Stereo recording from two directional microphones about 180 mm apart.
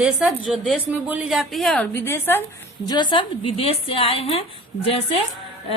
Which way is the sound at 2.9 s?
25° left (ahead or behind).